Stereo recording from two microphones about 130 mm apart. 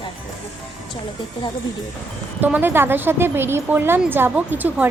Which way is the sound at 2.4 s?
15° right (ahead or behind).